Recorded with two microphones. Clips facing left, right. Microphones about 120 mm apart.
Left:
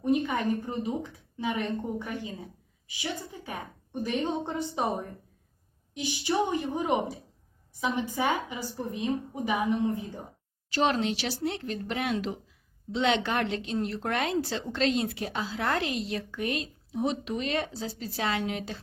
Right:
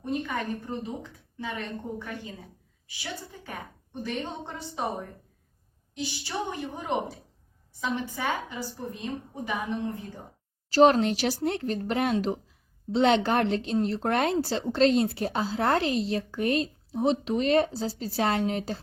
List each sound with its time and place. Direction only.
0.0 s a woman's voice: 15° left (ahead or behind)
10.7 s a woman's voice: 40° right (ahead or behind)